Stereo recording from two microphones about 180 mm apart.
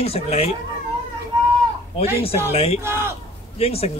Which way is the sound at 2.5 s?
35° left (ahead or behind).